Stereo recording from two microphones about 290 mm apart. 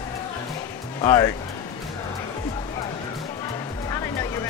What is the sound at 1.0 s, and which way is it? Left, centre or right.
Speech, centre.